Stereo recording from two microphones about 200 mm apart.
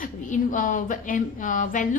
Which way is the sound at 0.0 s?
40° left (ahead or behind).